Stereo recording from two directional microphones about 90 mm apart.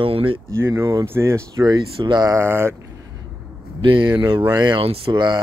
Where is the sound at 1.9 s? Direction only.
60° right (ahead or behind).